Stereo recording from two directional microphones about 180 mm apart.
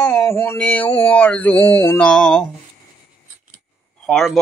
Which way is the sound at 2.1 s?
5° left (ahead or behind).